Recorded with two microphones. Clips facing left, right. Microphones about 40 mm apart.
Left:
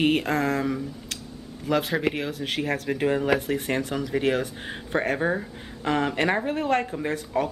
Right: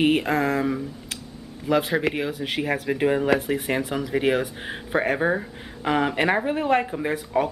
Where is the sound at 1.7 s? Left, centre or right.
Centre.